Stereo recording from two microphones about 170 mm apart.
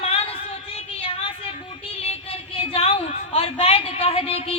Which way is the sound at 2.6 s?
35° left (ahead or behind).